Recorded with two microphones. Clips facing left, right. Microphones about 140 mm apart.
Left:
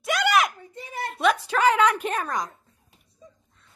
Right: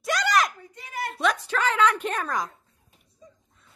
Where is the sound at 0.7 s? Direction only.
25° left (ahead or behind).